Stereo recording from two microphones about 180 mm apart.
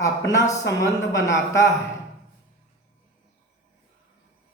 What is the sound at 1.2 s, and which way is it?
Speech, 15° left (ahead or behind).